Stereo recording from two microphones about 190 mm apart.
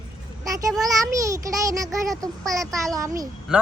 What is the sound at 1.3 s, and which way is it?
Speech, 15° right (ahead or behind).